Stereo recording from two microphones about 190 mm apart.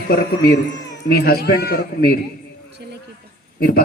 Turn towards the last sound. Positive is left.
turn(degrees=55)  # may be behind; listen again after turning